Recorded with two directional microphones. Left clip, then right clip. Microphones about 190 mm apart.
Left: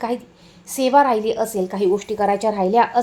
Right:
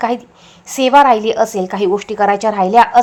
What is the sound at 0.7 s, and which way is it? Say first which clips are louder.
A woman's voice: right 6 dB; 15° right (ahead or behind).